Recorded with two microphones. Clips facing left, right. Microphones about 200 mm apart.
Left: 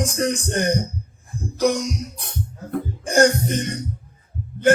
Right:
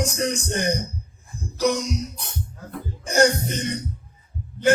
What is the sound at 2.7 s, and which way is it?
Music, 55° left (ahead or behind).